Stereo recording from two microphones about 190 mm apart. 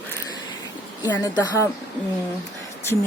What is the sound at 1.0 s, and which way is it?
Speech, 15° left (ahead or behind).